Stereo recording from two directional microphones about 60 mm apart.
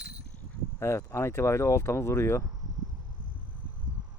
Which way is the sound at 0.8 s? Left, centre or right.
Left.